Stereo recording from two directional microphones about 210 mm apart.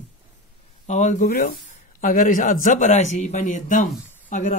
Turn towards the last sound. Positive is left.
turn(degrees=35)  # may be behind; listen again after turning